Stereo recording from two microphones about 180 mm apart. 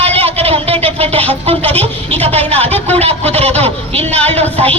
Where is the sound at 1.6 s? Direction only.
10° left (ahead or behind).